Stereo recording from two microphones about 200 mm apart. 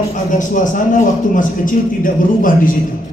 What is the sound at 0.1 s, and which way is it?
A man's voice, 40° left (ahead or behind).